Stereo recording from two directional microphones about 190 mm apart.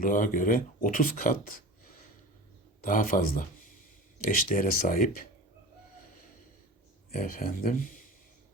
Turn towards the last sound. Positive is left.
turn(degrees=50)  # may be behind; listen again after turning